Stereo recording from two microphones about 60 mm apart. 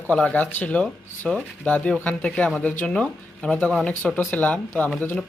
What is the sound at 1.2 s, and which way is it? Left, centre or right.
Speech, centre.